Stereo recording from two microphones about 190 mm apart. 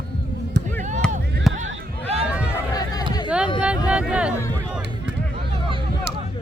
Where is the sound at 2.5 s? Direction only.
20° left (ahead or behind).